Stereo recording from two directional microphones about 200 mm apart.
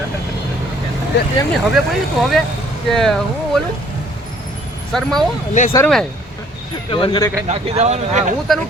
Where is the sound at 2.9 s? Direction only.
Centre (ahead or behind).